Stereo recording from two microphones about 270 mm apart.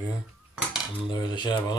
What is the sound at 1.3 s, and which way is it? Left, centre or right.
Speech, centre.